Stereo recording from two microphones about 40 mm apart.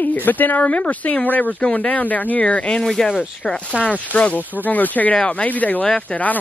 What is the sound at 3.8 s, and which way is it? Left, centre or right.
Speech, left.